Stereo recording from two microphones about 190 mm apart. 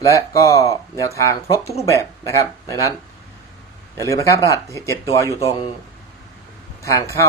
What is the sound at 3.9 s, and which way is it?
Speech, 15° left (ahead or behind).